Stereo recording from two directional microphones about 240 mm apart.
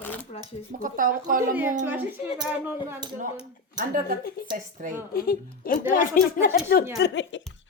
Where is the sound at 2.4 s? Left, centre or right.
Centre.